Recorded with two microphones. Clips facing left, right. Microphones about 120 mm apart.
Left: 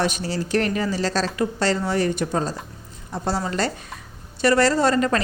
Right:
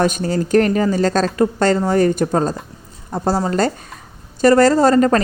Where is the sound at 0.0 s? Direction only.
45° right (ahead or behind).